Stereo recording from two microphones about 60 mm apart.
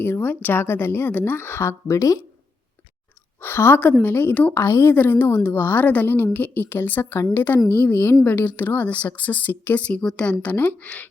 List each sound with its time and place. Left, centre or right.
0.0 s a woman's voice: left
3.4 s a woman's voice: left
4.5 s speech: left
4.9 s a woman's voice: left
10.0 s a woman's voice: centre
10.2 s speech: left